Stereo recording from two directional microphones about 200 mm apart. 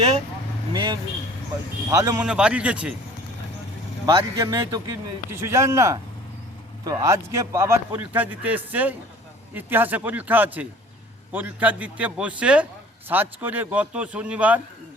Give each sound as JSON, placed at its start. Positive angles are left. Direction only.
{"t": 0.7, "sound": "a man's voice", "side_deg": -25}
{"t": 2.2, "sound": "speech", "side_deg": -5}
{"t": 4.0, "sound": "a man's voice", "side_deg": -15}